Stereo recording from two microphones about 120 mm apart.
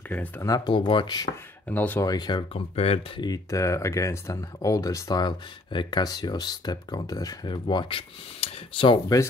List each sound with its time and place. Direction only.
0.7 s speech: 45° left (ahead or behind)
1.7 s speech: 15° left (ahead or behind)
2.0 s speech: 35° left (ahead or behind)
2.7 s speech: 55° left (ahead or behind)
3.2 s speech: 30° left (ahead or behind); by 9.0 s 45° left (ahead or behind)